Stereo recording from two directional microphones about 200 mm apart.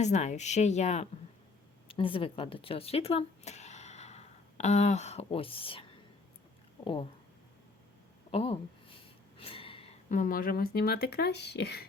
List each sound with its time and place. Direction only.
0.0 s speech: 35° left (ahead or behind)
6.8 s speech: 25° left (ahead or behind)
8.3 s speech: 30° left (ahead or behind)
9.4 s gasp: 25° left (ahead or behind)
10.1 s speech: 40° left (ahead or behind)